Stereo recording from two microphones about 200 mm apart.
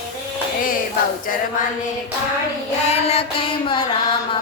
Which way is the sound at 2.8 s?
30° left (ahead or behind).